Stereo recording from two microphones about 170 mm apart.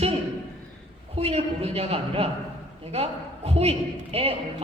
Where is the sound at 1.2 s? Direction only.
35° right (ahead or behind).